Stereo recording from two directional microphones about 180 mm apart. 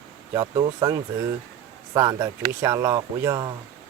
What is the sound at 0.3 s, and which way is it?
Speech, 25° right (ahead or behind).